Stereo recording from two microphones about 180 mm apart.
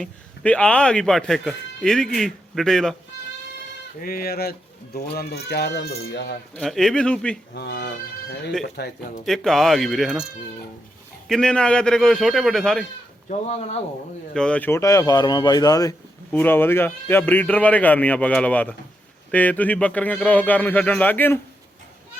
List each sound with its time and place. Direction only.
0.0 s speech: 5° left (ahead or behind)
4.0 s speech: 55° left (ahead or behind)
6.6 s speech: centre (ahead or behind)
7.5 s speech: 65° left (ahead or behind)
9.2 s speech: centre (ahead or behind)
11.3 s speech: 5° left (ahead or behind)
14.3 s speech: 5° left (ahead or behind)